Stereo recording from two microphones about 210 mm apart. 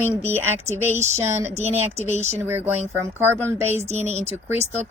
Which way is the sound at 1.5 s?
30° right (ahead or behind).